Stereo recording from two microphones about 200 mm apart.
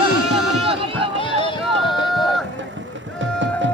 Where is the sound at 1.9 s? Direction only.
Centre (ahead or behind).